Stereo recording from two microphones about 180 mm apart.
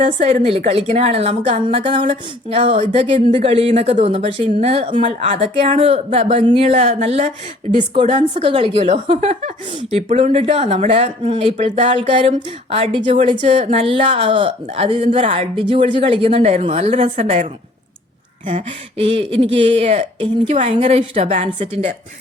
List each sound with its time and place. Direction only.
0.0 s speech: 40° right (ahead or behind)